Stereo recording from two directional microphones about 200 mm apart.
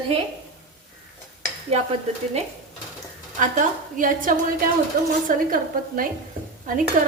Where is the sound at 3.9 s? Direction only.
40° right (ahead or behind).